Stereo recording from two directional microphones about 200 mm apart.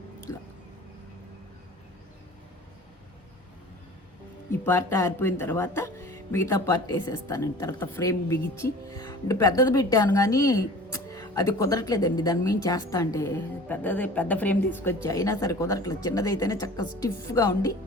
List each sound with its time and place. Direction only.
4.6 s speech: 10° left (ahead or behind)